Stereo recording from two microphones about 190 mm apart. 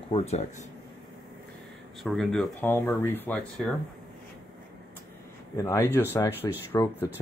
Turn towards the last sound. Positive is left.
turn(degrees=10)  # may be behind; listen again after turning